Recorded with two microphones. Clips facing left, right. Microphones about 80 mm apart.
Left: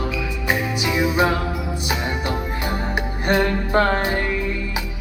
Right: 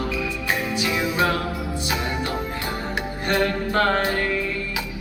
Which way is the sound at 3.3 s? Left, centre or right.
Left.